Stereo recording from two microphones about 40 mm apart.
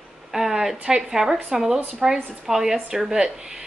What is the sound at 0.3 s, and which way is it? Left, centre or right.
A woman's voice, centre.